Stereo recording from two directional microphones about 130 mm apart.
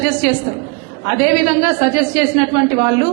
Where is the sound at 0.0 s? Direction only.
15° right (ahead or behind).